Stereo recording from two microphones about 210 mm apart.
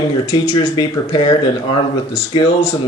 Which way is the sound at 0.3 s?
25° left (ahead or behind).